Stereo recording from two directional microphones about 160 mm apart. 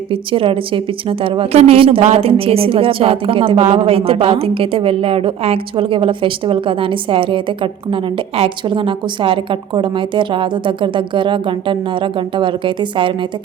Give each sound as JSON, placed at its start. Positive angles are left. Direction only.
{"t": 0.1, "sound": "a woman's voice", "side_deg": -35}